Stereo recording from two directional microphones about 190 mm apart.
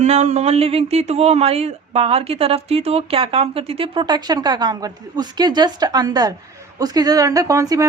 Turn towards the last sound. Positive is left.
turn(degrees=-15)  # may be behind; listen again after turning